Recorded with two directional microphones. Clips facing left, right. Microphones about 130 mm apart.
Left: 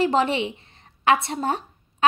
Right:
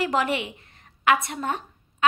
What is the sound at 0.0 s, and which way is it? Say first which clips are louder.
A woman's voice: left 4 dB; 25° left (ahead or behind).